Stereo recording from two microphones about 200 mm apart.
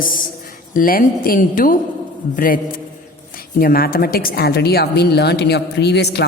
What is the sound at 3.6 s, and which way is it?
A woman's voice, 50° left (ahead or behind).